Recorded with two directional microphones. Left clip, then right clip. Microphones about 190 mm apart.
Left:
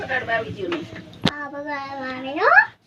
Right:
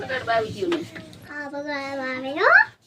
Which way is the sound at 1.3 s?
55° right (ahead or behind).